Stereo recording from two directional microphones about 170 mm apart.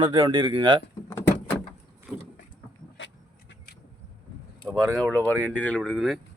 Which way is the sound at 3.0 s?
90° left.